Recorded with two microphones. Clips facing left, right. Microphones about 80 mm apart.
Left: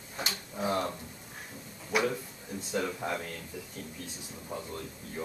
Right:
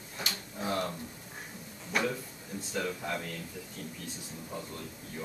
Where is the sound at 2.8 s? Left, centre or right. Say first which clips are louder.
Left 2 dB; left.